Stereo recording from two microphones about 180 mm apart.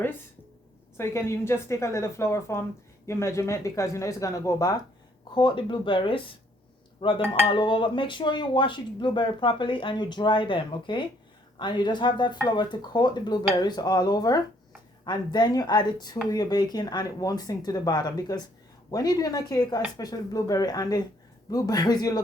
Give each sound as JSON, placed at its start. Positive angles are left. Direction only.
{"t": 0.9, "sound": "a woman's voice", "side_deg": 15}